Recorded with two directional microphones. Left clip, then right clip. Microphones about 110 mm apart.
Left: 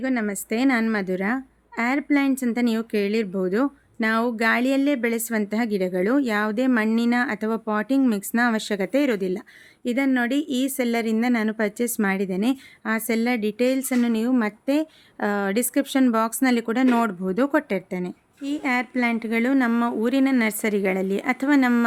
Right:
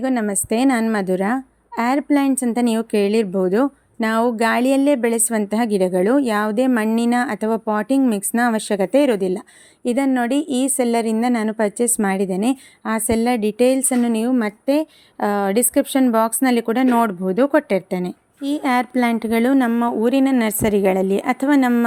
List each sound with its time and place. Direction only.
0.0 s a woman's voice: 35° right (ahead or behind); by 17.7 s 15° right (ahead or behind)
17.7 s a woman's voice: 35° right (ahead or behind)
19.7 s a woman's voice: 20° right (ahead or behind)